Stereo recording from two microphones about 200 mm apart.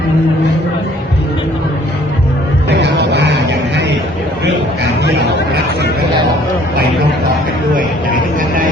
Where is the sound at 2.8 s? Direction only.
60° right (ahead or behind).